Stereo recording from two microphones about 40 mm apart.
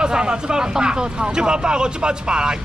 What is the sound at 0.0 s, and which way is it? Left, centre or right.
Speech, right.